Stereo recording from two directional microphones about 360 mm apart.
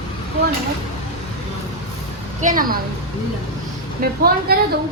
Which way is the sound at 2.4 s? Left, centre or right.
Right.